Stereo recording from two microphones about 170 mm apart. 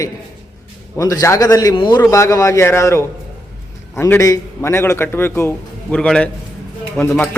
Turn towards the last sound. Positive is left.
turn(degrees=10)  # may be behind; listen again after turning